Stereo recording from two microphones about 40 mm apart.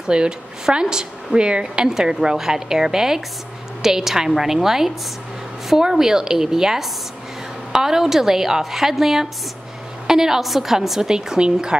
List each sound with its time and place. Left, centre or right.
0.0 s a woman's voice: right